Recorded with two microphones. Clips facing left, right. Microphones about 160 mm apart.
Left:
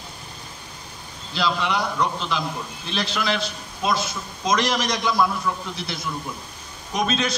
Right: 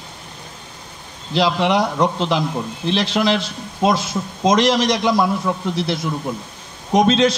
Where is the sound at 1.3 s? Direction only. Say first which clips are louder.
Right 7 dB; 80° right.